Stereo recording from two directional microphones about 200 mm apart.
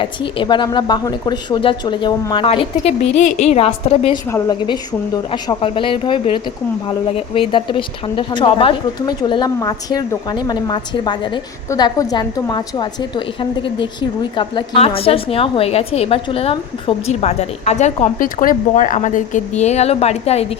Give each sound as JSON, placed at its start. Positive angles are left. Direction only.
{"t": 0.0, "sound": "a woman's voice", "side_deg": 25}
{"t": 4.3, "sound": "a woman's voice", "side_deg": 10}